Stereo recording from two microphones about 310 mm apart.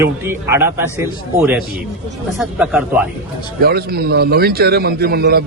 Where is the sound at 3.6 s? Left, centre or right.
Right.